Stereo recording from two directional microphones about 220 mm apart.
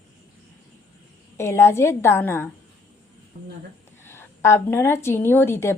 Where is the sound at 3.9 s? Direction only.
10° left (ahead or behind).